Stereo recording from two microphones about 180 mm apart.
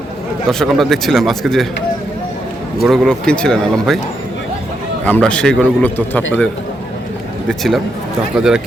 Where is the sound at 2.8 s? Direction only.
Centre (ahead or behind).